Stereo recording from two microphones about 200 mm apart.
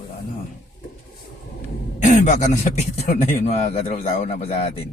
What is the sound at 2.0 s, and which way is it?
A man's voice, 40° left (ahead or behind).